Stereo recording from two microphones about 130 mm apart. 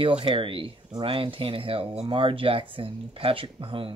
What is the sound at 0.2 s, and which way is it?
Speech, 40° right (ahead or behind).